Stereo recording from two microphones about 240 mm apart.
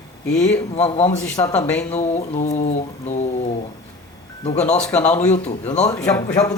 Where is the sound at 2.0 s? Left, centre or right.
Left.